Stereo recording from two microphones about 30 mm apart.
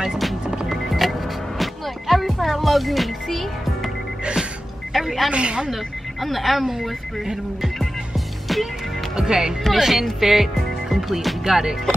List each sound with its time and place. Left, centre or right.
0.7 s music: centre
3.3 s speech: centre
4.9 s a sound: centre
5.3 s speech: right
6.2 s speech: centre
9.1 s speech: right
9.8 s speech: centre
10.2 s music: centre
11.1 s speech: centre